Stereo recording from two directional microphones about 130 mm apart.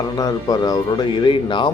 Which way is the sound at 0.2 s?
30° left (ahead or behind).